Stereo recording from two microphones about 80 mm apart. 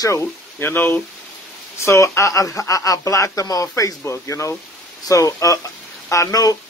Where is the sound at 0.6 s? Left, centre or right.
Left.